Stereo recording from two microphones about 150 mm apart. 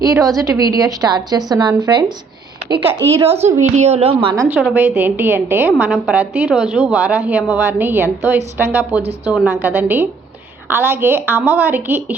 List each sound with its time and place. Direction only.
0.0 s a woman's voice: 20° right (ahead or behind)
3.2 s a woman's voice: 45° right (ahead or behind)
4.4 s a woman's voice: 15° right (ahead or behind)